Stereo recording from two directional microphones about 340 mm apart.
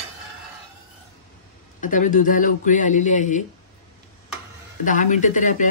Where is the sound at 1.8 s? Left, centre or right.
Left.